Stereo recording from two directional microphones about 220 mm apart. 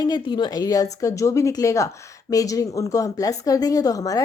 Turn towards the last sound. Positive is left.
turn(degrees=15)  # may be behind; listen again after turning